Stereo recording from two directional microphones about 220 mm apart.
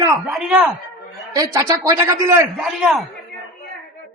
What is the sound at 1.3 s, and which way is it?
A man's voice, 15° right (ahead or behind).